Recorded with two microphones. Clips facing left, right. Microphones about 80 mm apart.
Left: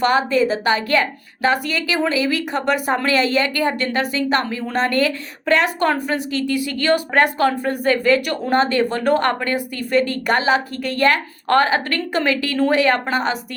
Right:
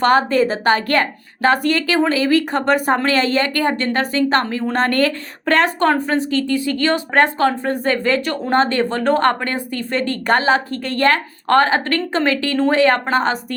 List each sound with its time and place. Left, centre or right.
0.0 s a woman's voice: right